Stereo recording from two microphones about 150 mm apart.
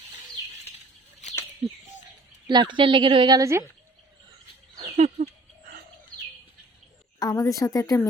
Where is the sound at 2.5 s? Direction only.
30° right (ahead or behind).